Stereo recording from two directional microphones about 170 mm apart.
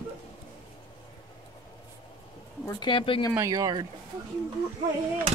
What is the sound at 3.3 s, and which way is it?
Speech, 20° right (ahead or behind).